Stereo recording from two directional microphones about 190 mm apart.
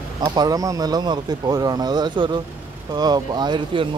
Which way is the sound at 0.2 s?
20° right (ahead or behind).